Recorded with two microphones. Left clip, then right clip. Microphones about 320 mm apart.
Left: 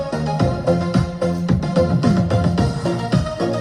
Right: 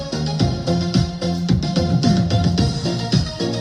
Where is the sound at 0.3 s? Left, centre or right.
Centre.